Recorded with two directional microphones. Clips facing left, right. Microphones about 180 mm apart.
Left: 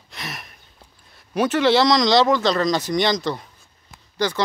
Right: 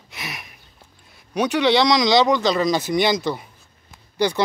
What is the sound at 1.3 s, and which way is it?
Speech, 5° left (ahead or behind).